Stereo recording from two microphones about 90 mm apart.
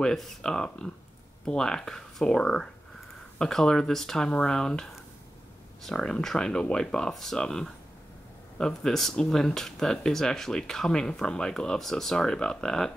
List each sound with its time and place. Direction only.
0.0 s speech: 5° left (ahead or behind)